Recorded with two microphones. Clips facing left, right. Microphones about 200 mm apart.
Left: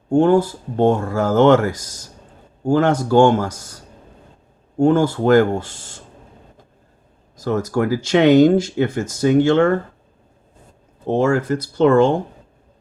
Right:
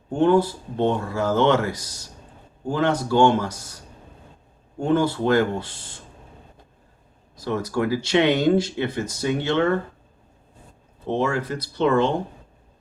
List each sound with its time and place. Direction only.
0.1 s speech: 45° left (ahead or behind)
4.8 s speech: 45° left (ahead or behind)
7.3 s speech: 45° left (ahead or behind)
11.1 s speech: 45° left (ahead or behind)